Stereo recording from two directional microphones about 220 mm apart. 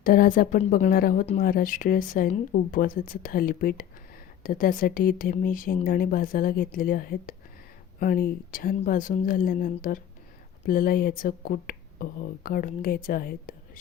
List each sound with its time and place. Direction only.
0.0 s speech: 40° left (ahead or behind)